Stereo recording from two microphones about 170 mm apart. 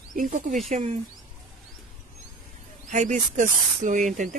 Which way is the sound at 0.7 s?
40° right (ahead or behind).